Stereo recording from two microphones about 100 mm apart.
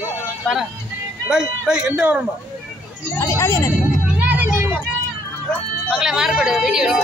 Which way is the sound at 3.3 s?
25° left (ahead or behind).